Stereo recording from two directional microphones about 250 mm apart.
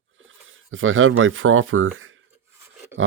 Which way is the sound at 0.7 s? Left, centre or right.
Right.